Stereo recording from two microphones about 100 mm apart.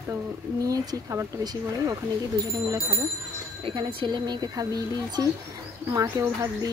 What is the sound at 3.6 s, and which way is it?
Speech, 55° right (ahead or behind).